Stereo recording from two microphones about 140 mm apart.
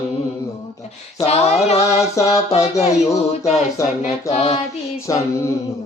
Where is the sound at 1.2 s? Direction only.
50° left (ahead or behind).